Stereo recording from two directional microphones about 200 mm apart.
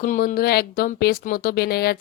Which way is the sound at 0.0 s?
40° left (ahead or behind).